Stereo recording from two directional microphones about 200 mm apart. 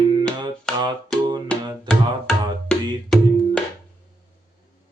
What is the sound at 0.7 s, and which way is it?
Music, centre (ahead or behind).